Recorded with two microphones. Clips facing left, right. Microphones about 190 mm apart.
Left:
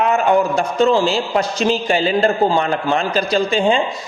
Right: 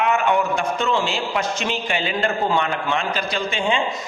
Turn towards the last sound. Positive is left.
turn(degrees=35)  # may be behind; listen again after turning